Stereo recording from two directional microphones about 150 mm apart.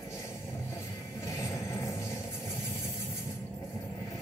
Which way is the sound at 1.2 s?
15° left (ahead or behind).